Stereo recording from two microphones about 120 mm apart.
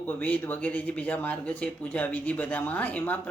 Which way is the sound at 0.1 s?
15° left (ahead or behind).